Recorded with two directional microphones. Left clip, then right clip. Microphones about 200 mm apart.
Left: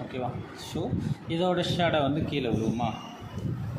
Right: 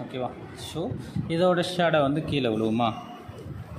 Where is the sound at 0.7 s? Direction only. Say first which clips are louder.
Even; 25° right (ahead or behind).